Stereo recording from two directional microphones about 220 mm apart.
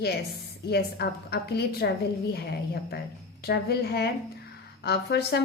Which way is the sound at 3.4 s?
45° left (ahead or behind).